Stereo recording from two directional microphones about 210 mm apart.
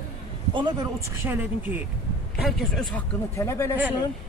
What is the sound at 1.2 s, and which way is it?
A man's voice, 10° right (ahead or behind).